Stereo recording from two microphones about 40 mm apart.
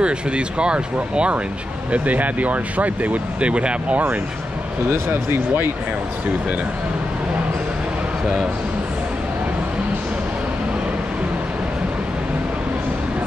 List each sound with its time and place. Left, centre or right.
0.0 s speech: right
1.9 s speech: right